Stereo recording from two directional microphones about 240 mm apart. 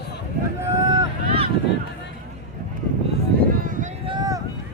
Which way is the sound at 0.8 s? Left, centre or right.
Centre.